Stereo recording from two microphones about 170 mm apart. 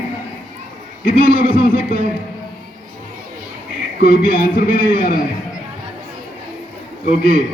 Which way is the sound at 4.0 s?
60° left (ahead or behind).